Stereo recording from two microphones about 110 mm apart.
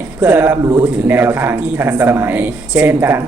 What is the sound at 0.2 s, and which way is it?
Speech, 20° right (ahead or behind).